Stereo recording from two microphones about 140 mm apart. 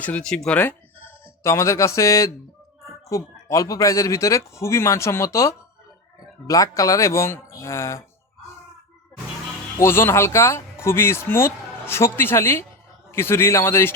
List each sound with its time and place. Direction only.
0.0 s speech: 10° left (ahead or behind)
9.7 s speech: 20° left (ahead or behind)